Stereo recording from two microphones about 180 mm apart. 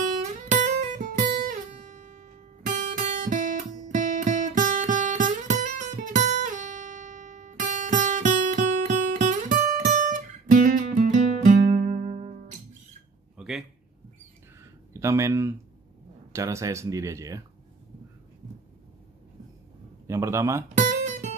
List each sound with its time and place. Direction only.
0.2 s guitar: 40° right (ahead or behind)
1.5 s music: 40° right (ahead or behind)
13.4 s a sound: 5° right (ahead or behind)
14.9 s speech: 15° right (ahead or behind)
20.1 s speech: 15° right (ahead or behind)
20.6 s guitar: 45° right (ahead or behind)